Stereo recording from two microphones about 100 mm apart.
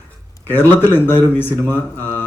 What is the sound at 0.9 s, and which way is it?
Speech, 20° left (ahead or behind).